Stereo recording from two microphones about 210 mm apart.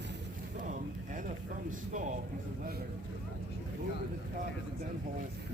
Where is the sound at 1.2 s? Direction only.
40° right (ahead or behind).